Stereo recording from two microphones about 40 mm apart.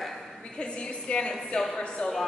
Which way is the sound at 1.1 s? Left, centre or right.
Left.